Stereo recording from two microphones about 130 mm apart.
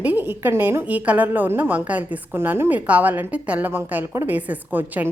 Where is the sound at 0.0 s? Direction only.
15° right (ahead or behind).